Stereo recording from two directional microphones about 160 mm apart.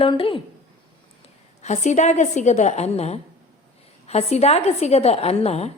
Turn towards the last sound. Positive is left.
turn(degrees=40)  # may be behind; listen again after turning